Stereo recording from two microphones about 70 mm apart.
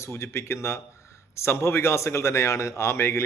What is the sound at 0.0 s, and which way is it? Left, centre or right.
A man's voice, left.